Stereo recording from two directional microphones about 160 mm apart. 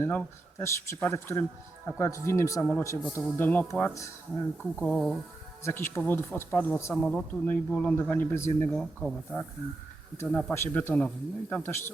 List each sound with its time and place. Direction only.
0.0 s speech: 10° left (ahead or behind)
4.8 s speech: 5° left (ahead or behind)
6.9 s speech: 5° left (ahead or behind)